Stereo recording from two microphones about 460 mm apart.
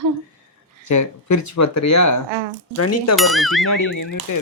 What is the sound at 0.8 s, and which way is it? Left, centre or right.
Speech, left.